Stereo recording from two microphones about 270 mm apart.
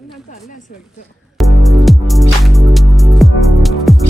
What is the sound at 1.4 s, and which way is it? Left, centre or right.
Music, centre.